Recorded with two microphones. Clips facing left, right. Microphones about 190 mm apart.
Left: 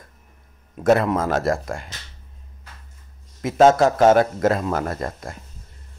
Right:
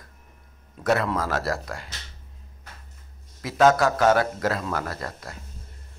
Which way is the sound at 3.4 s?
25° left (ahead or behind).